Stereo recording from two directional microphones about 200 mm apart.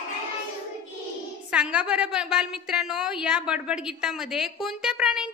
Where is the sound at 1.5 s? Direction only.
5° right (ahead or behind).